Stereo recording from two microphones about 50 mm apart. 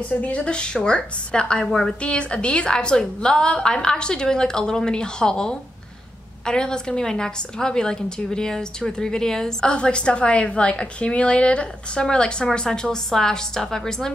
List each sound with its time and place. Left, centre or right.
0.1 s a woman's voice: left; by 14.1 s centre